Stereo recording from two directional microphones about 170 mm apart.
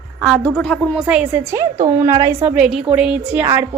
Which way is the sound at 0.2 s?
Centre (ahead or behind).